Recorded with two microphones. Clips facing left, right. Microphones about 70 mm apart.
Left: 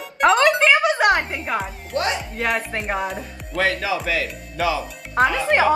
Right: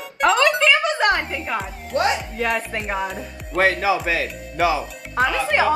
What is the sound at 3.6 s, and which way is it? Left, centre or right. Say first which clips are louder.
Speech: right 3 dB; right.